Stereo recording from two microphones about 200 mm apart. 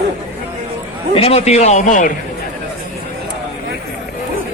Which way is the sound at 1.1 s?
30° left (ahead or behind).